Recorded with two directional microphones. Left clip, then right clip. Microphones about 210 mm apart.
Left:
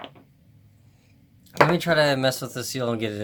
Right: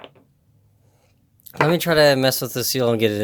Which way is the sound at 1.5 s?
55° right (ahead or behind).